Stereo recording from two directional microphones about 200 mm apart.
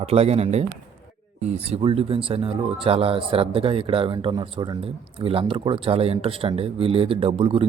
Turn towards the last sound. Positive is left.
turn(degrees=-25)  # may be behind; listen again after turning